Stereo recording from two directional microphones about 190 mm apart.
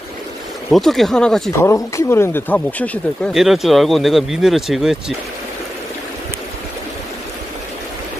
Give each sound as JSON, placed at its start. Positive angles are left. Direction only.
{"t": 0.7, "sound": "speech", "side_deg": 0}
{"t": 1.6, "sound": "speech", "side_deg": 15}